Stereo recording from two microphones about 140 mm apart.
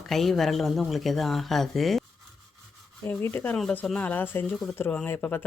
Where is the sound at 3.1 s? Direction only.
15° left (ahead or behind).